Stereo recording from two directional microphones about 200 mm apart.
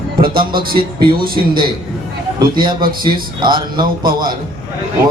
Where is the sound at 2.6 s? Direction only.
20° right (ahead or behind).